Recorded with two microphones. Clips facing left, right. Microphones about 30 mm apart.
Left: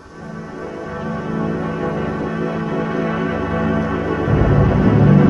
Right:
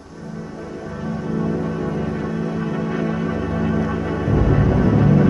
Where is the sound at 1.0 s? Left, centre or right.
Left.